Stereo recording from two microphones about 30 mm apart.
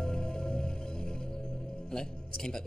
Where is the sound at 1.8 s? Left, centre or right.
Left.